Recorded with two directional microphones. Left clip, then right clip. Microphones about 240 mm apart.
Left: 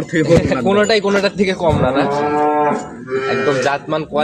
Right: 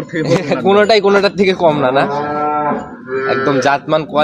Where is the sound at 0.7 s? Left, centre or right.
Right.